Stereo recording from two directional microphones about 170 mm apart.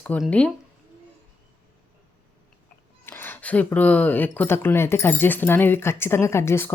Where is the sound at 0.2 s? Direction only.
5° left (ahead or behind).